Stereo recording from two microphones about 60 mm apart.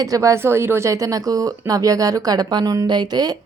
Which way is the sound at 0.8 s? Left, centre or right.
Right.